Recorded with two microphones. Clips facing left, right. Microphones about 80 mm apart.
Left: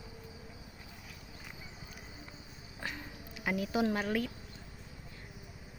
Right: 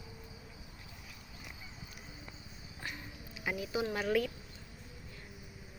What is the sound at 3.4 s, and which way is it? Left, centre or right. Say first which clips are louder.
Speech: left 4 dB; left.